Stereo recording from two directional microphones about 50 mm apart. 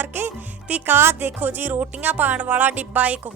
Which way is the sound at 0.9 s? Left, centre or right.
Right.